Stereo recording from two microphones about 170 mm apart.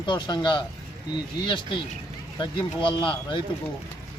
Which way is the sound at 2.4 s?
30° left (ahead or behind).